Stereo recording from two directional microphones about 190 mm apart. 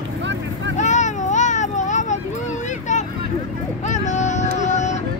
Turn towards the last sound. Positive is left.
turn(degrees=40)  # may be behind; listen again after turning